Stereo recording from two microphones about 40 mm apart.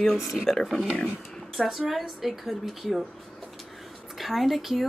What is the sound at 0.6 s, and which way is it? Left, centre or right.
Speech, centre.